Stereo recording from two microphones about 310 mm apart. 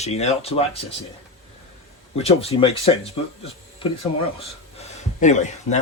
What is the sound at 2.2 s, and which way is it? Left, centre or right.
Speech, centre.